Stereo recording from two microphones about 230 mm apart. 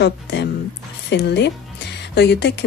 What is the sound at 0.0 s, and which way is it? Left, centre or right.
Speech, left.